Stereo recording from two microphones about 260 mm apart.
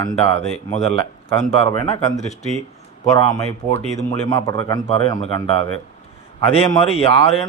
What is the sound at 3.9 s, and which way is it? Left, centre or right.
A man's voice, centre.